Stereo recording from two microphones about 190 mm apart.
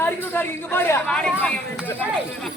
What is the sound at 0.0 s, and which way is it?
Speech, 10° left (ahead or behind).